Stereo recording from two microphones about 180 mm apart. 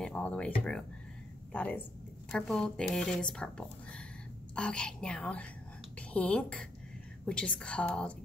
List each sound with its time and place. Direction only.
0.0 s a woman's voice: 5° left (ahead or behind)